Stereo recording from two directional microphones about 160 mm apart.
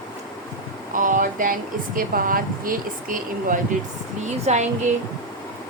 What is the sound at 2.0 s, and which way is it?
Speech, 60° right (ahead or behind).